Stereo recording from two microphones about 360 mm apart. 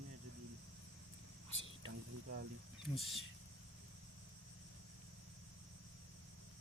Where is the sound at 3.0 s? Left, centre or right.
Centre.